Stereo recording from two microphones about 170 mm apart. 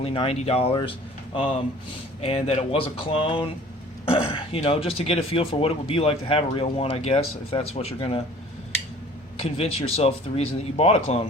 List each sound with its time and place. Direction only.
0.0 s speech: 35° left (ahead or behind)
9.4 s speech: 35° left (ahead or behind)